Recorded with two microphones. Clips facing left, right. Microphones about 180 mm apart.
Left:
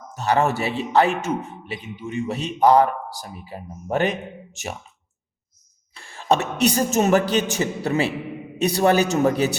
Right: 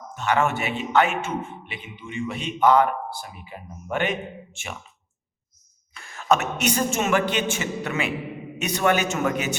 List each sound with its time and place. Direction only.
0.1 s a man's voice: 35° left (ahead or behind)
5.9 s a man's voice: 30° left (ahead or behind)